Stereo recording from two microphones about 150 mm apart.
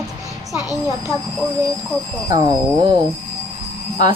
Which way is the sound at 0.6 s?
25° left (ahead or behind).